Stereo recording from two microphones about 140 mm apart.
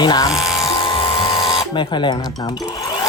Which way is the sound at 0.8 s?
40° left (ahead or behind).